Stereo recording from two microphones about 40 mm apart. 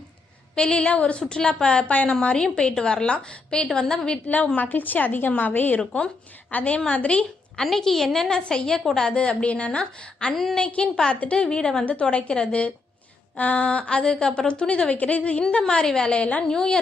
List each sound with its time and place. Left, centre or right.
0.5 s a woman's voice: left
0.9 s a woman's voice: left
1.9 s a woman's voice: left
2.3 s a woman's voice: left
4.5 s a woman's voice: left
6.7 s a woman's voice: left
7.6 s a woman's voice: centre
9.0 s a woman's voice: left
11.4 s a woman's voice: centre
15.6 s a woman's voice: centre
16.1 s a woman's voice: left
16.5 s a woman's voice: centre